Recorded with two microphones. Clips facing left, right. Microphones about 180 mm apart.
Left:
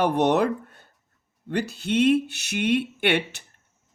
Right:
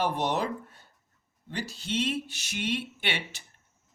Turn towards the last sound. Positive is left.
turn(degrees=60)  # may be behind; listen again after turning